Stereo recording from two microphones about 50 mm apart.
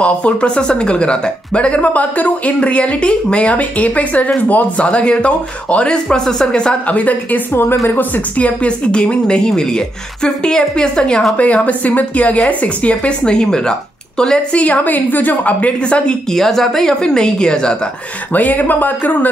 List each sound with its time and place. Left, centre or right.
0.0 s speech: left
4.8 s a woman's voice: left
16.3 s a woman's voice: centre
18.3 s speech: left